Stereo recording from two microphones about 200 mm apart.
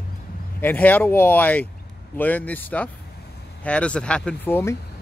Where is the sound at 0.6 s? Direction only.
10° left (ahead or behind).